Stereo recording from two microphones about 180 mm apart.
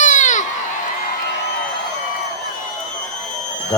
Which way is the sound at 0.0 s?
45° left (ahead or behind).